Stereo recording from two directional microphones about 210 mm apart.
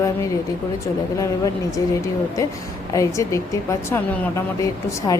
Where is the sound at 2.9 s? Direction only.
15° left (ahead or behind).